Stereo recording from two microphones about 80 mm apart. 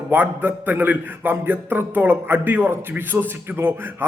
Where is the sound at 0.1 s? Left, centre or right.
Right.